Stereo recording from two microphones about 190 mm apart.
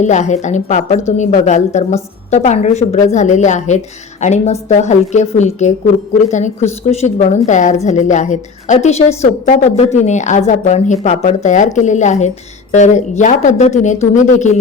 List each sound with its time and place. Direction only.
0.0 s a woman's voice: 40° left (ahead or behind)